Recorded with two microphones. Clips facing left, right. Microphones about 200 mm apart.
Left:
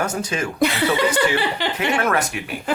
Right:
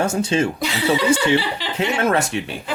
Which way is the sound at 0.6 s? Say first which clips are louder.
Left 1 dB; 55° left (ahead or behind).